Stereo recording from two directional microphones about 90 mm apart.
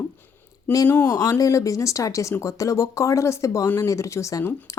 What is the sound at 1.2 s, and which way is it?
A woman's voice, 40° left (ahead or behind).